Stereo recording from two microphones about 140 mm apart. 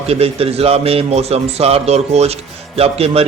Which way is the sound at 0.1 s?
45° right (ahead or behind).